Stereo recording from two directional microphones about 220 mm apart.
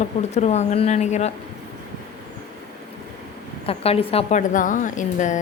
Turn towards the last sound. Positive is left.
turn(degrees=35)  # may be behind; listen again after turning